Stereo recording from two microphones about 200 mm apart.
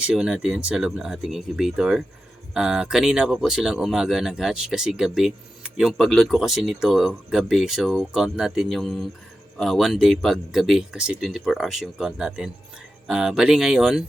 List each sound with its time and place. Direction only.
0.0 s speech: 5° right (ahead or behind)